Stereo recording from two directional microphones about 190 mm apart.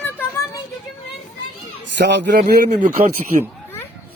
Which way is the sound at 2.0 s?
65° right (ahead or behind).